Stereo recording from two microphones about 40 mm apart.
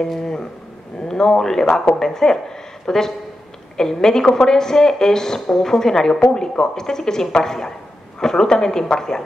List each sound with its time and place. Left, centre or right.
1.0 s a woman's voice: centre